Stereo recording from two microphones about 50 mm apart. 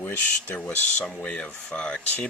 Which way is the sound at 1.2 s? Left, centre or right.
Left.